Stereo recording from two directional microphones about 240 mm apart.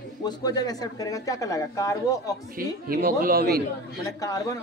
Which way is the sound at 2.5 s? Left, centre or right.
Right.